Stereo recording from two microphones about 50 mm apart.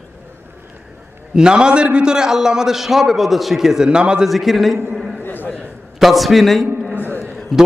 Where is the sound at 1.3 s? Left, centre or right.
Centre.